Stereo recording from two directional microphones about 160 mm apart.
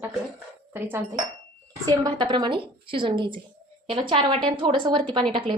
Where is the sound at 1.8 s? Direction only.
25° right (ahead or behind).